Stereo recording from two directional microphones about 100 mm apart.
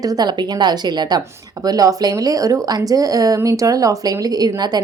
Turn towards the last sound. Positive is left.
turn(degrees=-40)  # may be behind; listen again after turning